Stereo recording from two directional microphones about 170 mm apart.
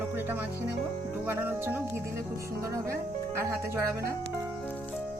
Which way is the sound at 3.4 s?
15° right (ahead or behind).